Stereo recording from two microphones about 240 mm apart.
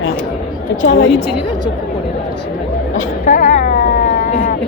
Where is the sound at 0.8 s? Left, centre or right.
Left.